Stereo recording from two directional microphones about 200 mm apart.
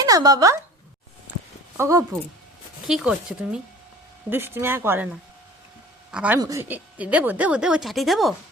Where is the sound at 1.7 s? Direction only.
15° right (ahead or behind).